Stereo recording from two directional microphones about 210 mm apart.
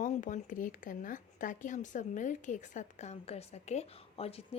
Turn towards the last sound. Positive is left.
turn(degrees=30)  # may be behind; listen again after turning